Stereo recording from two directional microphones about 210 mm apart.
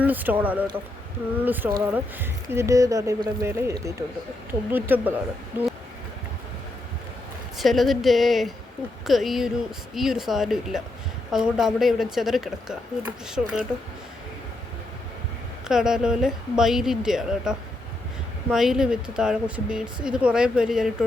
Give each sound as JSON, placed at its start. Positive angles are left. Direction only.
{"t": 0.0, "sound": "speech", "side_deg": -10}
{"t": 7.6, "sound": "speech", "side_deg": 0}
{"t": 15.6, "sound": "speech", "side_deg": -5}